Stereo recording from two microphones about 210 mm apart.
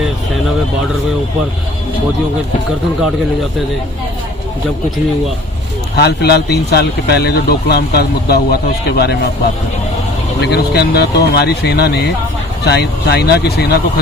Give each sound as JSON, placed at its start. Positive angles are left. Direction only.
{"t": 6.0, "sound": "speech", "side_deg": 50}
{"t": 10.4, "sound": "speech", "side_deg": 50}